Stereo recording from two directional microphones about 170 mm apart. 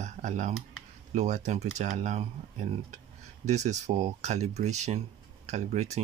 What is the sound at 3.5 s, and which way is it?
Speech, 45° right (ahead or behind).